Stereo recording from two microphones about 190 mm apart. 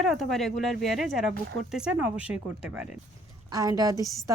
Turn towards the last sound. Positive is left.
turn(degrees=-20)  # may be behind; listen again after turning